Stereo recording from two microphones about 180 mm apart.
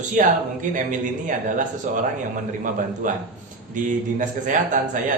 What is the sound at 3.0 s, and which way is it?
A man's voice, 45° right (ahead or behind).